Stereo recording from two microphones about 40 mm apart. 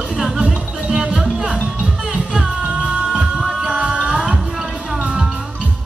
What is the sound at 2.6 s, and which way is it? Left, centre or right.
Music, right.